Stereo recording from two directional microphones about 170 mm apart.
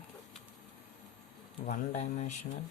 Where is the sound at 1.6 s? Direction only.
40° left (ahead or behind).